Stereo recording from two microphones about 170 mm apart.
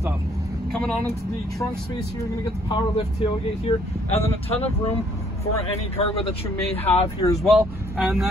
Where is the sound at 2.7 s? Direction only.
35° left (ahead or behind).